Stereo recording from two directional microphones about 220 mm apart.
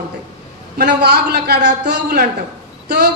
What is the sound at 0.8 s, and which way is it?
Speech, 45° right (ahead or behind).